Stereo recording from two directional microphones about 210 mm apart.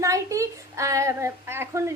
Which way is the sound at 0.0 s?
15° right (ahead or behind).